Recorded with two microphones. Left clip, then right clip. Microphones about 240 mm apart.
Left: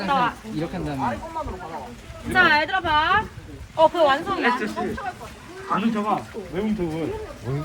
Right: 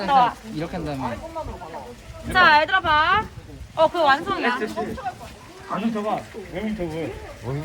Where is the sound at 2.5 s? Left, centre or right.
Centre.